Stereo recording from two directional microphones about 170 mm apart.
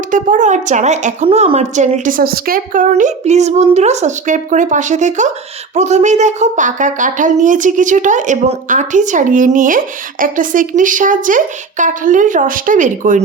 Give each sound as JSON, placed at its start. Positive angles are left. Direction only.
{"t": 0.1, "sound": "speech", "side_deg": -50}